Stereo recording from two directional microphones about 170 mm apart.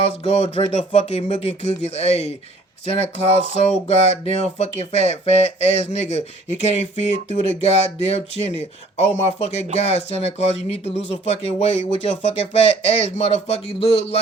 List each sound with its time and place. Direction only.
0.3 s speech: 40° left (ahead or behind)